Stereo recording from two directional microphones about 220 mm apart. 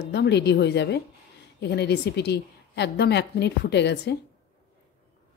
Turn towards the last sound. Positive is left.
turn(degrees=50)  # may be behind; listen again after turning